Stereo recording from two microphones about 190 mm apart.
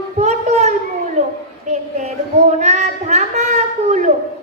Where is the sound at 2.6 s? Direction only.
35° right (ahead or behind).